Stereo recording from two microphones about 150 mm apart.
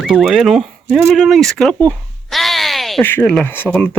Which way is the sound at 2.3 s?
Centre (ahead or behind).